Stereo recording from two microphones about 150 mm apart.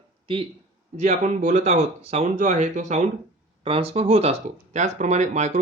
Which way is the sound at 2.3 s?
55° right (ahead or behind).